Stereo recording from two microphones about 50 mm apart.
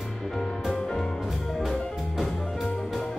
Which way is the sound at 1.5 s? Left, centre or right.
Centre.